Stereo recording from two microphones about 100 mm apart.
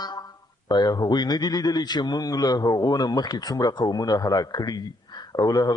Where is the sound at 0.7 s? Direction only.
45° left (ahead or behind).